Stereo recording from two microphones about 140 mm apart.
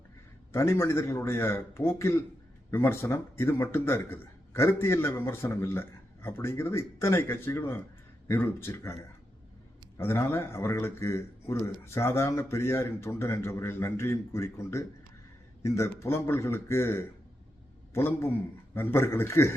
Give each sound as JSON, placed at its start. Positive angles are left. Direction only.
{"t": 0.5, "sound": "a man's voice", "side_deg": 20}
{"t": 10.0, "sound": "a man's voice", "side_deg": 20}